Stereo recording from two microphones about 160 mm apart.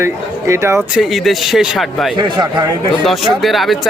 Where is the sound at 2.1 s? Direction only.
25° right (ahead or behind).